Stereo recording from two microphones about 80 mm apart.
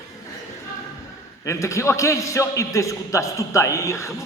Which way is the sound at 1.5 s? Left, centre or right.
Left.